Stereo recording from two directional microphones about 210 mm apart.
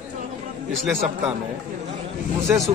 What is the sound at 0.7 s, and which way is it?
Speech, centre (ahead or behind).